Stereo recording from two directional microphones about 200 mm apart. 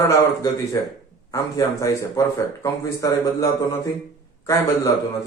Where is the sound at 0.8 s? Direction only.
15° left (ahead or behind).